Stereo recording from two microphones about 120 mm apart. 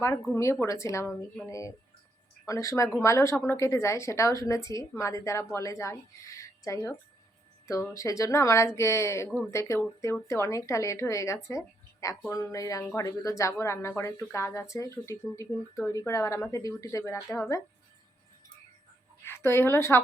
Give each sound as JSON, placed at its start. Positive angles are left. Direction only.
{"t": 0.0, "sound": "a woman's voice", "side_deg": 25}
{"t": 7.9, "sound": "a woman's voice", "side_deg": 25}
{"t": 11.4, "sound": "a sound", "side_deg": 25}
{"t": 12.3, "sound": "a woman's voice", "side_deg": 25}
{"t": 19.2, "sound": "a woman's voice", "side_deg": 20}